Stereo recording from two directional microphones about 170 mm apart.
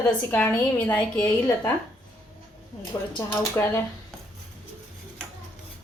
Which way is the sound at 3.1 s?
20° left (ahead or behind).